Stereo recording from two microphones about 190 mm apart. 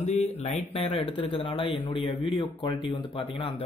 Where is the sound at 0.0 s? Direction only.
35° left (ahead or behind).